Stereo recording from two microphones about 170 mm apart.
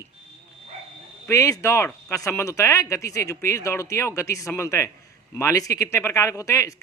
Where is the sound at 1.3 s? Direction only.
15° left (ahead or behind).